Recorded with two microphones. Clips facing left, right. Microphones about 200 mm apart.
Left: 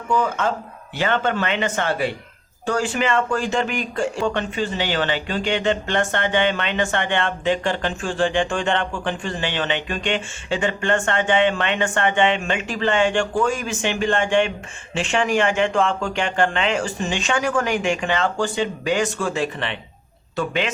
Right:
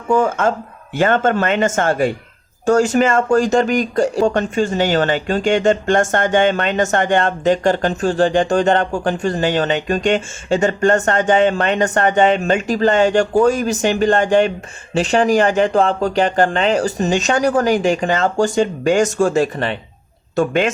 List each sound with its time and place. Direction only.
0.1 s speech: 50° right (ahead or behind)